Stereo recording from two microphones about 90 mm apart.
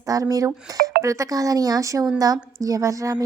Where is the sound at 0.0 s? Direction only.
40° right (ahead or behind).